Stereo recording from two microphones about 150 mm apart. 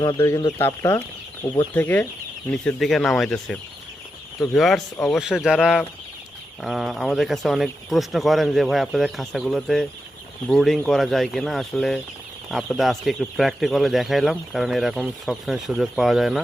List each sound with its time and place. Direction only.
0.2 s speech: 20° left (ahead or behind); by 16.4 s 5° right (ahead or behind)